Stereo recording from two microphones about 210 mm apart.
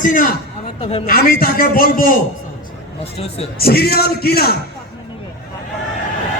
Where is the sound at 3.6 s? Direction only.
45° left (ahead or behind).